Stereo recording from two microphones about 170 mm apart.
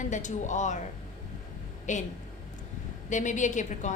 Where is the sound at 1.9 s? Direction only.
45° left (ahead or behind).